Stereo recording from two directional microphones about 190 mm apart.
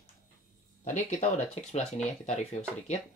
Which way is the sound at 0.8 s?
40° left (ahead or behind).